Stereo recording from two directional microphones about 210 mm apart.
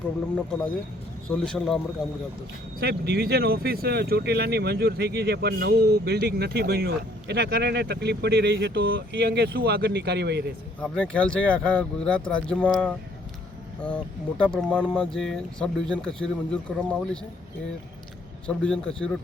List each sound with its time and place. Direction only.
1.5 s speech: centre (ahead or behind)
2.8 s speech: 50° right (ahead or behind)
10.8 s speech: 5° left (ahead or behind)
18.4 s speech: 5° left (ahead or behind)